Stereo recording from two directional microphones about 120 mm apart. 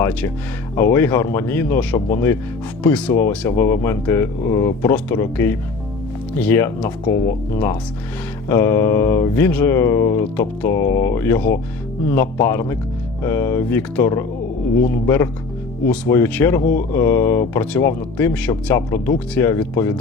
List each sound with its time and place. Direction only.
0.8 s speech: 20° left (ahead or behind)